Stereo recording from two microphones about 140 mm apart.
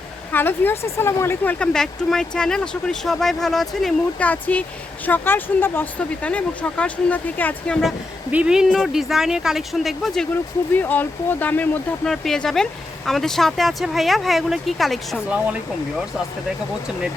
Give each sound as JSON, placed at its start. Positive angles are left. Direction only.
{"t": 0.3, "sound": "speech", "side_deg": 15}
{"t": 1.5, "sound": "speech", "side_deg": 5}
{"t": 8.3, "sound": "speech", "side_deg": -10}
{"t": 10.8, "sound": "speech", "side_deg": 10}